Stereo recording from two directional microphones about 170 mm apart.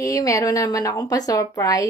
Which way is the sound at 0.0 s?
20° left (ahead or behind).